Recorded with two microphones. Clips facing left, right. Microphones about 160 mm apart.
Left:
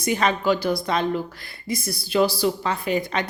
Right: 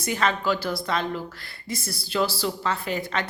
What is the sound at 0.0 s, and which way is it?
A woman's voice, 15° left (ahead or behind).